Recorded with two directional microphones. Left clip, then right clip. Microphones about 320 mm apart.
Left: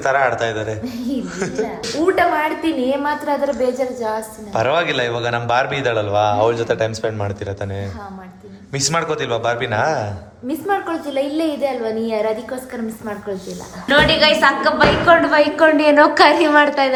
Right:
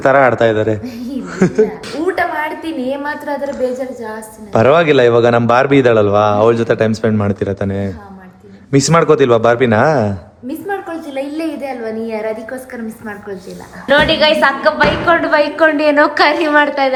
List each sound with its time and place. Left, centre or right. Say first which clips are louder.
0.0 s a man's voice: right 7 dB; right
2.1 s a woman's voice: left 1 dB; centre
4.5 s a man's voice: right 8 dB; right
8.7 s a man's voice: right 9 dB; right
10.7 s a woman's voice: left 2 dB; centre
13.8 s a woman's voice: right 3 dB; centre